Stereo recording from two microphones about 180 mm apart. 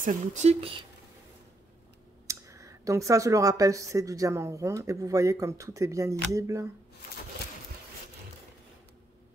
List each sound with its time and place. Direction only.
0.0 s speech: 40° right (ahead or behind)
2.2 s speech: 15° right (ahead or behind)